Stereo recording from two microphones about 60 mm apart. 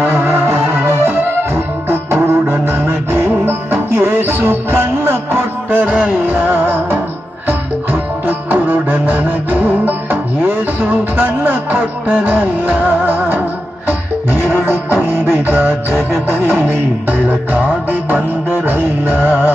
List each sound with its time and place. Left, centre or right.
0.0 s music: right
11.1 s music: right